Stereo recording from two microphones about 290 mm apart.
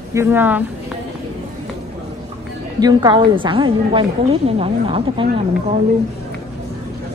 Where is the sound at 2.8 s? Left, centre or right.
Centre.